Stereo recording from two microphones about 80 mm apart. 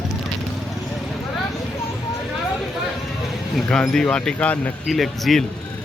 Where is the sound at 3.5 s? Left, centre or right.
Centre.